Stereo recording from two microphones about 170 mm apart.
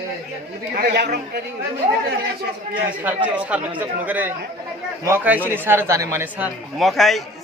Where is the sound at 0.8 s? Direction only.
80° right.